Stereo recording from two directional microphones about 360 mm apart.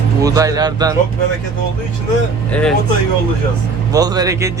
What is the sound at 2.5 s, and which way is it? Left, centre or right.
Speech, centre.